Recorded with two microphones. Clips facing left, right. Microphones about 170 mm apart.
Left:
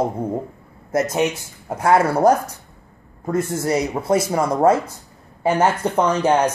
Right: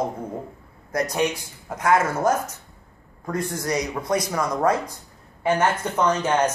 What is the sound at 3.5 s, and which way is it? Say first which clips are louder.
Speech: left 5 dB; 25° left (ahead or behind).